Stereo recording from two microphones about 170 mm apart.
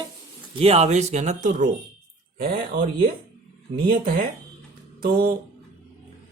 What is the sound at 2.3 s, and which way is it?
Speech, 60° right (ahead or behind).